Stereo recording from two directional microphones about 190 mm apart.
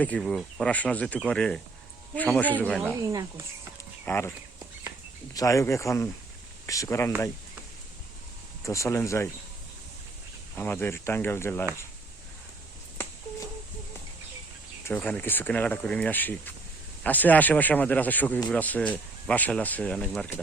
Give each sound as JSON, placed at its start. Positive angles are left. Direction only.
{"t": 0.0, "sound": "speech", "side_deg": 5}
{"t": 3.0, "sound": "speech", "side_deg": -20}
{"t": 4.0, "sound": "speech", "side_deg": 10}
{"t": 5.3, "sound": "speech", "side_deg": 15}
{"t": 8.6, "sound": "speech", "side_deg": 15}
{"t": 10.5, "sound": "speech", "side_deg": 10}
{"t": 14.8, "sound": "speech", "side_deg": 10}